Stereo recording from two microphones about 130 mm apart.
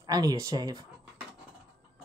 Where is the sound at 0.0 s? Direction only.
30° right (ahead or behind).